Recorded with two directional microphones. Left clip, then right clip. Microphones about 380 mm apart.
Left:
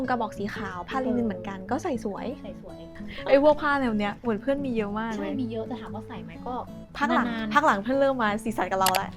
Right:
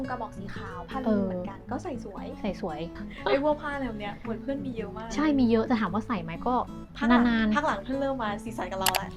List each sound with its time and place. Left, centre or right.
0.0 s a woman's voice: left
3.3 s a woman's voice: left
5.1 s a woman's voice: right
7.5 s a woman's voice: left
8.8 s speech: centre